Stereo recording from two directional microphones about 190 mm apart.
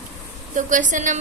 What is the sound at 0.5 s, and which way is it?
Speech, 45° right (ahead or behind).